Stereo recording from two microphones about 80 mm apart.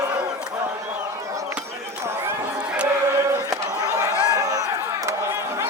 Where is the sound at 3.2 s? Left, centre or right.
Right.